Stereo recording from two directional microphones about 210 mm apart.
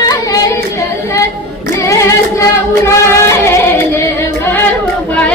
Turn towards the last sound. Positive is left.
turn(degrees=15)  # may be behind; listen again after turning